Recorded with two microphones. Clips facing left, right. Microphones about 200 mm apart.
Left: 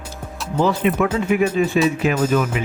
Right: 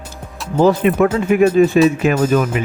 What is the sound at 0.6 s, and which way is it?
Speech, 45° right (ahead or behind).